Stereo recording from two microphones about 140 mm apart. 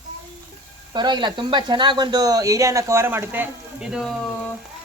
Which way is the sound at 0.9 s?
30° right (ahead or behind).